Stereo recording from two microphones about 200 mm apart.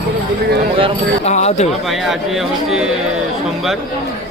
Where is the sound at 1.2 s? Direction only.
35° left (ahead or behind).